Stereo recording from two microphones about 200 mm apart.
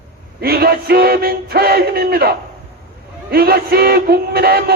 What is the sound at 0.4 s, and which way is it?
Speech, 50° right (ahead or behind).